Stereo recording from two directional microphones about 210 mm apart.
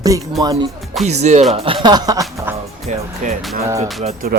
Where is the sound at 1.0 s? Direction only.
30° right (ahead or behind); by 2.6 s 15° right (ahead or behind).